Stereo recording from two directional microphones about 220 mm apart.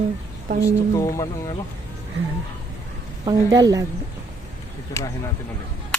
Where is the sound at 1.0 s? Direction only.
15° left (ahead or behind).